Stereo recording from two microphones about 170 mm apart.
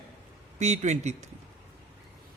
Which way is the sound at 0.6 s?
40° right (ahead or behind).